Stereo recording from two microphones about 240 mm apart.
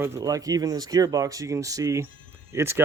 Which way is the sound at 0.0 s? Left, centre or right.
Centre.